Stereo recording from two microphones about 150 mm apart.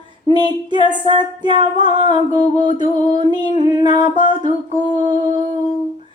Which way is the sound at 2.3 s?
60° left (ahead or behind).